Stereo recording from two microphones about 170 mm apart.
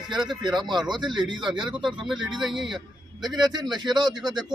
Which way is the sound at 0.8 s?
25° right (ahead or behind).